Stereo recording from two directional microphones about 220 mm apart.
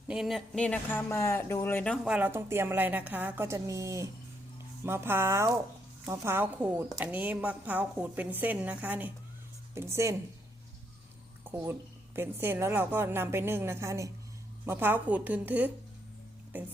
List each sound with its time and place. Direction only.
0.1 s speech: centre (ahead or behind)
11.5 s speech: 10° right (ahead or behind)